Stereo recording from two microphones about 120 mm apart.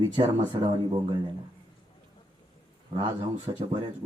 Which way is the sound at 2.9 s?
40° right (ahead or behind).